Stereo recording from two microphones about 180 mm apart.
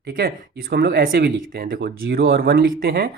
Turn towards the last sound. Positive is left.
turn(degrees=-60)  # may be behind; listen again after turning